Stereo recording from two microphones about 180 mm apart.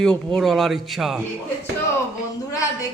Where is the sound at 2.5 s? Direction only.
20° left (ahead or behind).